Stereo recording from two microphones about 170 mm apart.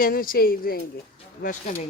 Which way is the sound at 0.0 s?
55° left (ahead or behind).